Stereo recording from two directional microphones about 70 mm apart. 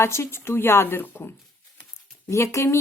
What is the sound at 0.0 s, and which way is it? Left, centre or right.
A woman's voice, left.